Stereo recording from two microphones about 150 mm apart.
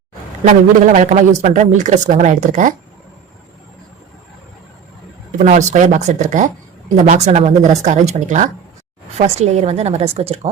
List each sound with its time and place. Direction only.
0.4 s speech: 55° right (ahead or behind)
5.4 s speech: 55° right (ahead or behind)